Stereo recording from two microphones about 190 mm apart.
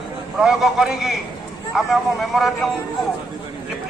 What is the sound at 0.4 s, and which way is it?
Speech, centre (ahead or behind).